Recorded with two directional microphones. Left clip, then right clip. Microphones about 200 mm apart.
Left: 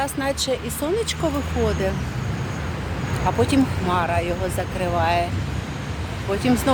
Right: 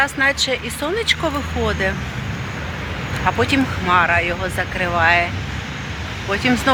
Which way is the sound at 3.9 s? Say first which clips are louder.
Right 7 dB; centre (ahead or behind).